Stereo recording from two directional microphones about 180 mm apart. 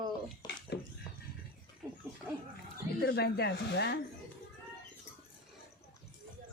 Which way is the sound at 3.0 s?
65° left (ahead or behind).